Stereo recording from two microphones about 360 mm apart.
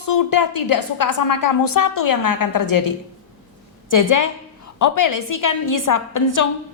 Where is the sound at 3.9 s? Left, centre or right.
Left.